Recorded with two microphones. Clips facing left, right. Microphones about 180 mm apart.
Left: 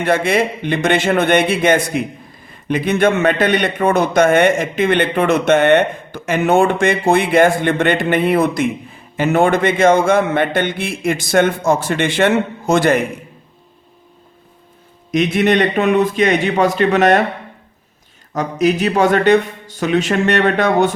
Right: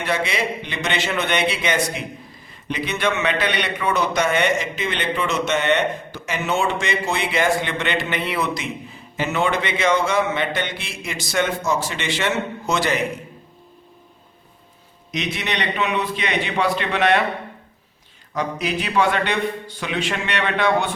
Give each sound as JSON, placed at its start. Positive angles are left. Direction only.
{"t": 0.0, "sound": "a man's voice", "side_deg": 50}
{"t": 15.1, "sound": "a man's voice", "side_deg": 50}
{"t": 18.3, "sound": "a man's voice", "side_deg": 45}